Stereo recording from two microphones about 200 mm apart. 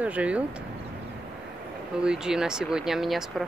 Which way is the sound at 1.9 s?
5° right (ahead or behind).